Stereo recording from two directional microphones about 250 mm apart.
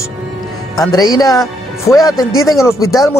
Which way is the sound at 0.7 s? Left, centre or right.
Centre.